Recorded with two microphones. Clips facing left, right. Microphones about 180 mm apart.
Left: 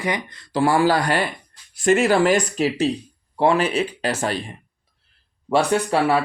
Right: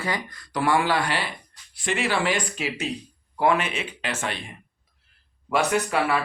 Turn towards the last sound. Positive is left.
turn(degrees=30)  # may be behind; listen again after turning